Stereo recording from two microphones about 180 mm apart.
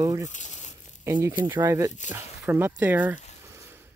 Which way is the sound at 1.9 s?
40° left (ahead or behind).